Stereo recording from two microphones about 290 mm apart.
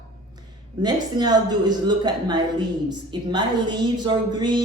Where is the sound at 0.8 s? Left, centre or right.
Centre.